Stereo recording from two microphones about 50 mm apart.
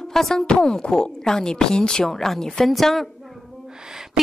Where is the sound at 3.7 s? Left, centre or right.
Centre.